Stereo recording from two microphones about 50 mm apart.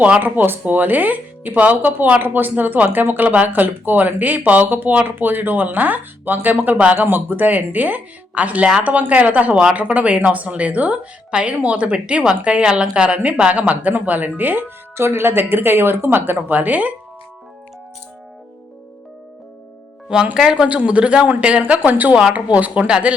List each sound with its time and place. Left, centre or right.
0.0 s speech: right
14.9 s speech: right
16.5 s speech: right
20.3 s speech: centre
20.7 s speech: right
21.8 s speech: right
22.1 s speech: right